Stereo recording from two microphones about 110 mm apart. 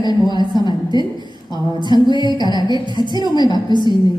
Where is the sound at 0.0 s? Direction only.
40° left (ahead or behind).